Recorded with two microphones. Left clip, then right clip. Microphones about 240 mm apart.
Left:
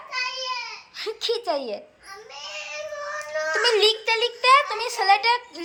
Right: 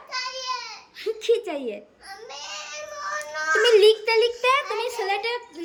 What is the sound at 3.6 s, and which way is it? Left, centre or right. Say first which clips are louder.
A child's voice: right 4 dB; centre.